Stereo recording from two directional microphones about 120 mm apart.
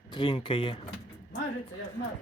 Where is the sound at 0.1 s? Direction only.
45° left (ahead or behind).